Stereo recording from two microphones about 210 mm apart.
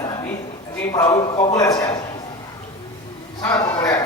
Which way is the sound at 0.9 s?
15° left (ahead or behind).